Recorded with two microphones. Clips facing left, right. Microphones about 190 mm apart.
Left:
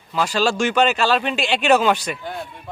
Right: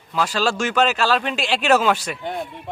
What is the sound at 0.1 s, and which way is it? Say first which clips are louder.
A man's voice: left 1 dB; centre (ahead or behind).